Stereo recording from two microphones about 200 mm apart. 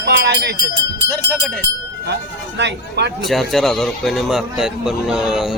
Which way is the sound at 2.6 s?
55° right (ahead or behind).